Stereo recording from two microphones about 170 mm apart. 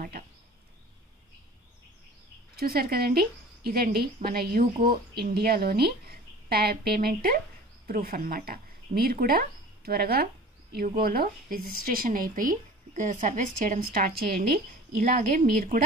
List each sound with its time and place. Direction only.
2.5 s a woman's voice: 60° right (ahead or behind)